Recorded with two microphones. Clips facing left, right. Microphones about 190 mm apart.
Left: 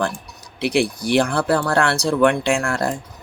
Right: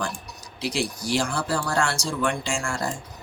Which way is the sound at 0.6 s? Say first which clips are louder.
Left 8 dB; 60° left (ahead or behind).